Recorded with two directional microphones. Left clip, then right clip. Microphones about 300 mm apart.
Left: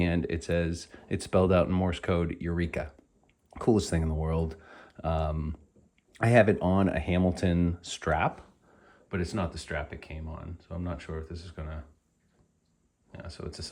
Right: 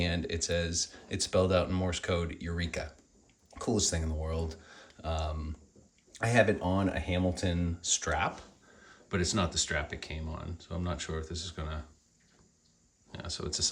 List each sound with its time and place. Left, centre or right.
0.0 s speech: left
9.0 s speech: centre
13.1 s speech: centre